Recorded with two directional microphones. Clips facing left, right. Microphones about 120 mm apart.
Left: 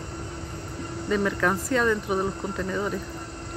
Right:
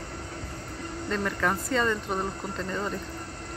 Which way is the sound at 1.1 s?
Centre (ahead or behind).